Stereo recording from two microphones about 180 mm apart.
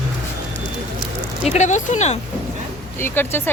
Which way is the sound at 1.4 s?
40° left (ahead or behind).